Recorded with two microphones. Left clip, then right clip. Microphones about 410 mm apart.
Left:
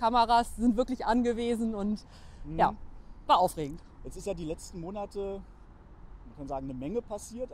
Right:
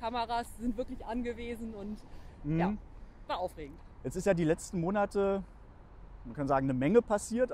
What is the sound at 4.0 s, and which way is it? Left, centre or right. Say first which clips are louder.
Speech: right 7 dB; right.